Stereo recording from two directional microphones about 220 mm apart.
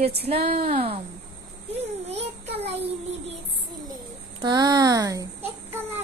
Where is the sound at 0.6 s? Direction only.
40° right (ahead or behind).